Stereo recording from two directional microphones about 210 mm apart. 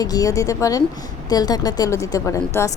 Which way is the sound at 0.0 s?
15° left (ahead or behind).